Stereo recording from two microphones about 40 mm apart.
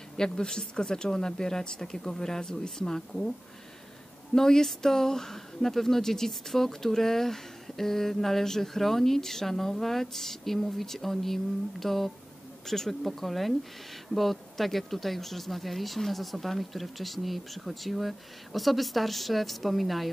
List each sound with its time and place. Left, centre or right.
0.2 s speech: centre
4.4 s speech: centre